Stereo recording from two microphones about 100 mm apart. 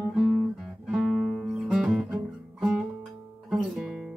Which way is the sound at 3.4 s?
5° right (ahead or behind).